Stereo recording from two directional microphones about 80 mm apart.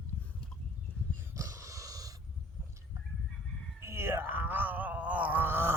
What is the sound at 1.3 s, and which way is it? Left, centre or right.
Dog, right.